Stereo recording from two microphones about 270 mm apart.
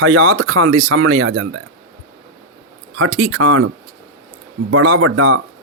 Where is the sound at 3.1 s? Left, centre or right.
Right.